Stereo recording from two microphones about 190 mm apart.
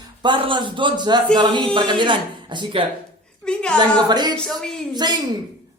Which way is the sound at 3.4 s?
5° left (ahead or behind).